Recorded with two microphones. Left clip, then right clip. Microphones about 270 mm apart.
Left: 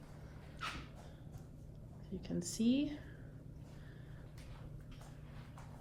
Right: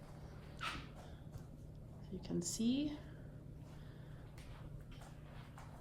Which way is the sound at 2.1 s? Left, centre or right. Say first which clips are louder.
Left 2 dB; right.